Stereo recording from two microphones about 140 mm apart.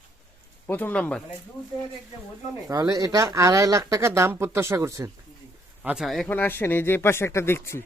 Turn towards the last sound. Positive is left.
turn(degrees=15)  # may be behind; listen again after turning